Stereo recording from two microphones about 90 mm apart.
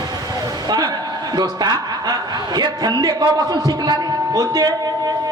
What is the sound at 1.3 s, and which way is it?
A man's voice, 50° right (ahead or behind).